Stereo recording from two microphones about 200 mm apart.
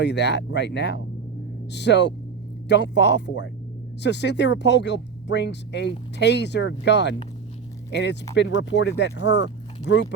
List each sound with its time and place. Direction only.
0.0 s speech: 60° left (ahead or behind)